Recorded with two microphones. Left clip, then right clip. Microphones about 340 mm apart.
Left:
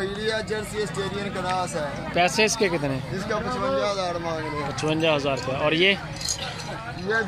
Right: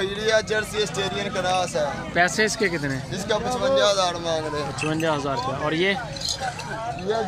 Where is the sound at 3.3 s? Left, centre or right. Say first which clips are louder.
Right 4 dB; right.